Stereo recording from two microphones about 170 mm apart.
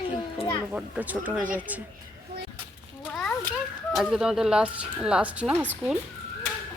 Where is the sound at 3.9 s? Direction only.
Centre (ahead or behind).